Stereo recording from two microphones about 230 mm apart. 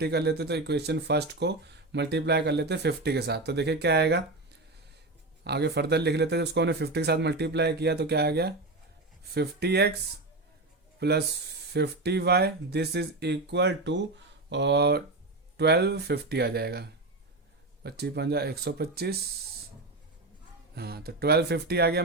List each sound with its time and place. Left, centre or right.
0.0 s speech: right
5.4 s speech: right
11.0 s speech: right
20.7 s speech: right